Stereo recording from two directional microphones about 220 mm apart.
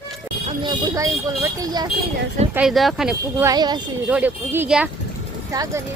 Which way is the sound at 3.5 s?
20° right (ahead or behind).